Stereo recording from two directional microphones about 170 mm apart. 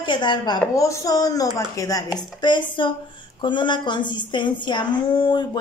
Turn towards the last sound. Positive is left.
turn(degrees=30)  # may be behind; listen again after turning